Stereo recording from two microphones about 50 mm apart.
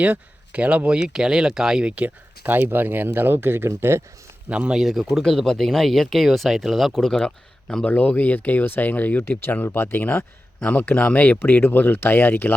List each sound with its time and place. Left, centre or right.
0.0 s speech: right
0.9 s speech: centre
1.8 s speech: right
2.0 s speech: right
3.7 s speech: right
4.4 s speech: right
4.7 s speech: centre
5.2 s speech: centre
6.9 s speech: centre
7.9 s speech: left
9.6 s speech: left
10.6 s speech: left